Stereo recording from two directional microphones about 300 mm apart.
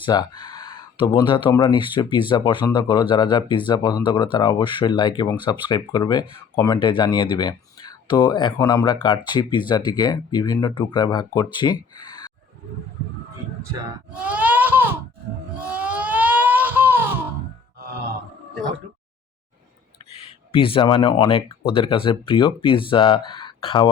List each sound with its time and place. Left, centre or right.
0.0 s speech: centre
14.2 s a sound: centre
15.7 s baby cry: centre
17.7 s grunt: right
20.1 s speech: centre